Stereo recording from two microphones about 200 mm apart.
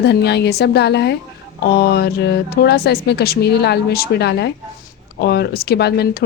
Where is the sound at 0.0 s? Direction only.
55° left (ahead or behind).